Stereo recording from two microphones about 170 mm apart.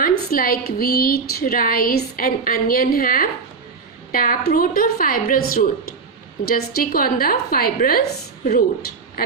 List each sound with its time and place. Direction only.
0.0 s a woman's voice: 60° left (ahead or behind)